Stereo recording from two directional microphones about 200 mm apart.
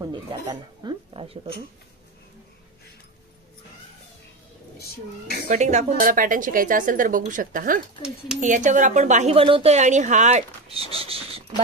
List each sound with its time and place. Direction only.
0.0 s speech: 20° right (ahead or behind)
4.7 s speech: 50° left (ahead or behind)
5.5 s speech: 35° right (ahead or behind)